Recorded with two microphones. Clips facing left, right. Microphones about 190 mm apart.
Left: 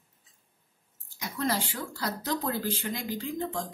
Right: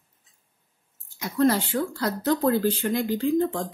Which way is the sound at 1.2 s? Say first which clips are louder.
Right 9 dB; 55° right (ahead or behind).